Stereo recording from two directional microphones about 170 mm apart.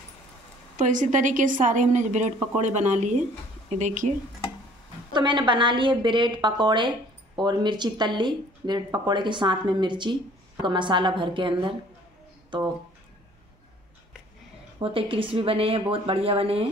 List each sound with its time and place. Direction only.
0.7 s a woman's voice: 45° right (ahead or behind)
5.1 s speech: 30° right (ahead or behind)
14.8 s speech: 35° right (ahead or behind)